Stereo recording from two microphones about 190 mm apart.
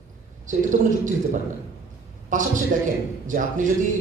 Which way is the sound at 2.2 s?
40° right (ahead or behind).